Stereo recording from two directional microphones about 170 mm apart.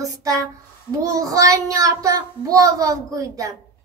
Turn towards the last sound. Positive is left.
turn(degrees=-20)  # may be behind; listen again after turning